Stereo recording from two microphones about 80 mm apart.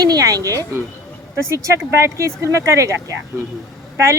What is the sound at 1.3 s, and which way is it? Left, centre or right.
Speech, right.